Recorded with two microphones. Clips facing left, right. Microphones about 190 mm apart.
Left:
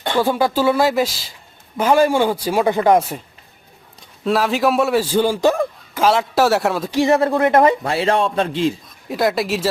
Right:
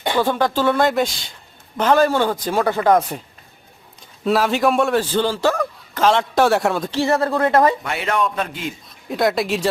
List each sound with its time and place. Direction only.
0.2 s a man's voice: 10° left (ahead or behind)
4.3 s a man's voice: centre (ahead or behind)
6.9 s speech: 15° left (ahead or behind)
9.0 s a man's voice: centre (ahead or behind)